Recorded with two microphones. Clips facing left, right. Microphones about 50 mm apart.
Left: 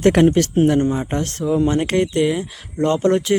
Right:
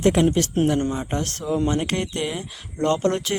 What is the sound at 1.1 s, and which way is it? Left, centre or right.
Speech, left.